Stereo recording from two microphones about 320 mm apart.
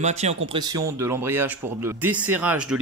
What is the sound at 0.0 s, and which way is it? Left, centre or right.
Speech, right.